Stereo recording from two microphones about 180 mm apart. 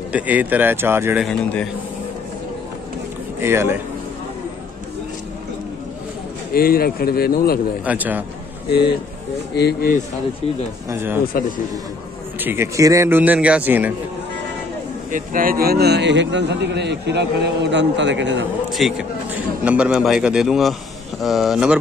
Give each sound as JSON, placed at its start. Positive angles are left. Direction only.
{"t": 0.1, "sound": "a man's voice", "side_deg": -10}
{"t": 1.2, "sound": "a man's voice", "side_deg": 5}
{"t": 3.3, "sound": "a man's voice", "side_deg": -15}
{"t": 6.5, "sound": "speech", "side_deg": 55}
{"t": 7.8, "sound": "a man's voice", "side_deg": -10}
{"t": 8.6, "sound": "speech", "side_deg": 65}
{"t": 10.9, "sound": "a man's voice", "side_deg": -15}
{"t": 12.4, "sound": "a man's voice", "side_deg": -10}
{"t": 15.0, "sound": "speech", "side_deg": -50}
{"t": 18.7, "sound": "a man's voice", "side_deg": 0}